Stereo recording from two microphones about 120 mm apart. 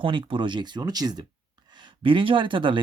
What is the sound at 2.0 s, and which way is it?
Speech, 45° right (ahead or behind).